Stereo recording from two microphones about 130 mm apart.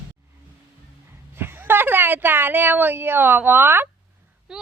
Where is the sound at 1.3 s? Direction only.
15° right (ahead or behind).